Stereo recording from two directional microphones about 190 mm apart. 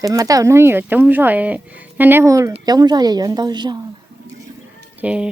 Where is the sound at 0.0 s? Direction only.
20° right (ahead or behind).